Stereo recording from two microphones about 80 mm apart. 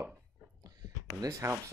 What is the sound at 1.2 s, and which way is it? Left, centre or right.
Speech, right.